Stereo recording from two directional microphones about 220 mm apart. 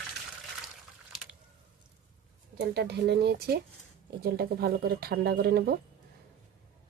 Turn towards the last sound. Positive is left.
turn(degrees=-45)  # may be behind; listen again after turning